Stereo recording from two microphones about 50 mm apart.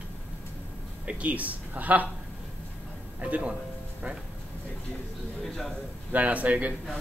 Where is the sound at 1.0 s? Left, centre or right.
Right.